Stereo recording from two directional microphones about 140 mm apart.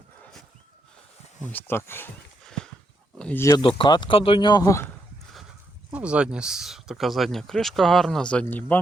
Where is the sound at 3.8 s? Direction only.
35° left (ahead or behind).